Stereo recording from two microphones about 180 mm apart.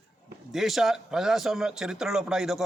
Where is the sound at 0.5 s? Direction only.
Centre (ahead or behind).